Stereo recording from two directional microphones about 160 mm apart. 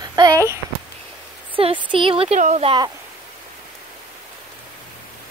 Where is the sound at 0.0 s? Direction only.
25° right (ahead or behind).